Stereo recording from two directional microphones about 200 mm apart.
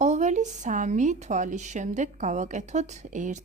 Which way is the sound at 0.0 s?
35° right (ahead or behind).